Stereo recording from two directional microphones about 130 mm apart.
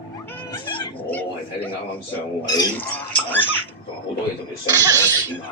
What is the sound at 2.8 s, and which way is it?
Pig, 15° left (ahead or behind).